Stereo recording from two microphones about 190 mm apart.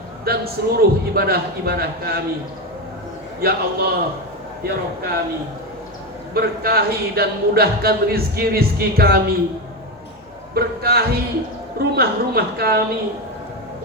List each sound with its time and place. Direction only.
0.3 s speech: 55° right (ahead or behind)
3.4 s a man's voice: 55° right (ahead or behind)
6.3 s speech: 55° right (ahead or behind)
10.5 s a man's voice: 55° right (ahead or behind)